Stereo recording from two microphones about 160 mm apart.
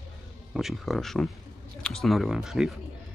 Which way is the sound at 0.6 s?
Centre (ahead or behind).